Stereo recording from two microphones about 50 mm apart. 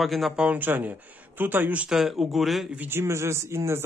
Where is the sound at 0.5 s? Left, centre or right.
Right.